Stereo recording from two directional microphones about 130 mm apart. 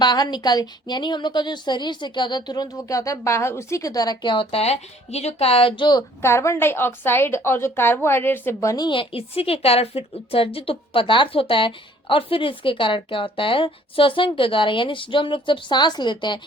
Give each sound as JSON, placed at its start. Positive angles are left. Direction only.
{"t": 0.0, "sound": "a woman's voice", "side_deg": 30}
{"t": 6.2, "sound": "a woman's voice", "side_deg": 20}
{"t": 8.7, "sound": "a woman's voice", "side_deg": 35}